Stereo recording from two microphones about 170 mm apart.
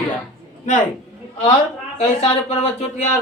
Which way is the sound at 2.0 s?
40° left (ahead or behind).